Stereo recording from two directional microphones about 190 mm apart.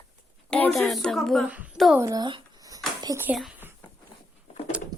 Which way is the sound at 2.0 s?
20° right (ahead or behind).